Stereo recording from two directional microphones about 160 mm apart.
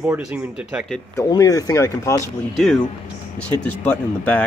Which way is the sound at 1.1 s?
20° left (ahead or behind).